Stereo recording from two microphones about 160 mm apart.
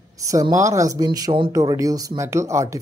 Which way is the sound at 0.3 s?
20° right (ahead or behind).